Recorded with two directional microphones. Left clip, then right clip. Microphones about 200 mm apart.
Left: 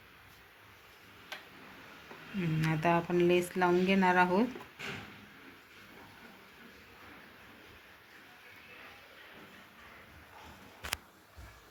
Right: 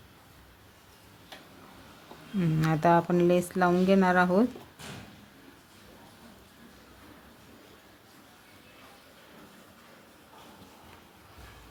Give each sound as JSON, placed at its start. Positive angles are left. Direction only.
{"t": 2.4, "sound": "speech", "side_deg": -55}